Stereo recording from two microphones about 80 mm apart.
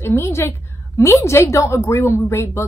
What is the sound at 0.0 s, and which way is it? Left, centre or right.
A woman's voice, left.